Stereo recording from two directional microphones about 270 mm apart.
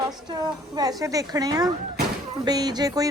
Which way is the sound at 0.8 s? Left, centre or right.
Centre.